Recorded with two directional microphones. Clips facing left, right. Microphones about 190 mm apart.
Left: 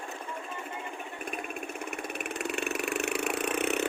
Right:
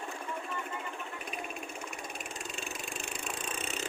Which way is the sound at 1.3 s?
55° left (ahead or behind).